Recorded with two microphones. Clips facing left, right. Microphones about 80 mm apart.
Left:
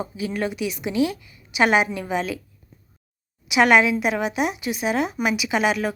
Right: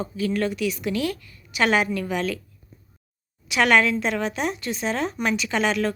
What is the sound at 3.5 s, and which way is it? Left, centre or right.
Speech, centre.